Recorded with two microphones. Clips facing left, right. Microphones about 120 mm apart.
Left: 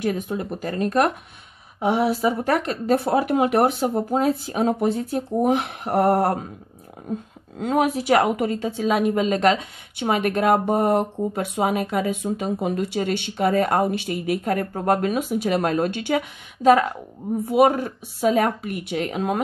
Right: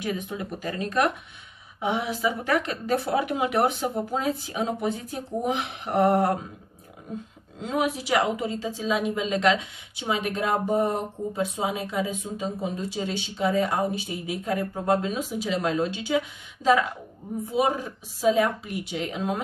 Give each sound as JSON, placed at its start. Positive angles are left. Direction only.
{"t": 0.0, "sound": "speech", "side_deg": 50}
{"t": 7.5, "sound": "a woman's voice", "side_deg": 55}